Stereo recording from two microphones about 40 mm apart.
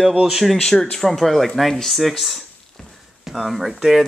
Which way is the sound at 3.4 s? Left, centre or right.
Centre.